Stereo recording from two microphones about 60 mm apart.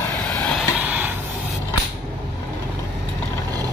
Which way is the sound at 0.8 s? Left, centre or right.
Right.